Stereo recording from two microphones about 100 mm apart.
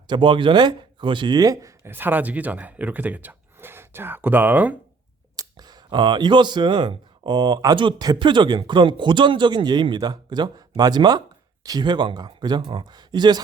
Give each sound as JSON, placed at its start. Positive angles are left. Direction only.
{"t": 0.1, "sound": "speech", "side_deg": -55}
{"t": 1.8, "sound": "speech", "side_deg": -20}
{"t": 5.4, "sound": "speech", "side_deg": -40}